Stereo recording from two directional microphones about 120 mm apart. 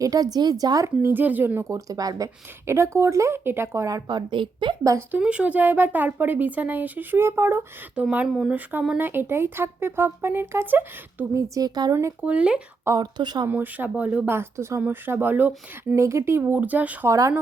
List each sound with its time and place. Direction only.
0.0 s a woman's voice: 30° right (ahead or behind)
1.7 s a woman's voice: 30° right (ahead or behind)
4.8 s a woman's voice: 30° right (ahead or behind)
5.1 s speech: 10° right (ahead or behind)
8.0 s a woman's voice: 10° right (ahead or behind); by 11.9 s 35° right (ahead or behind)
12.2 s speech: 10° right (ahead or behind)
12.8 s speech: 25° right (ahead or behind)
13.1 s speech: 35° right (ahead or behind)
13.5 s speech: 15° right (ahead or behind)
16.0 s speech: 25° right (ahead or behind)
17.1 s a woman's voice: 25° right (ahead or behind)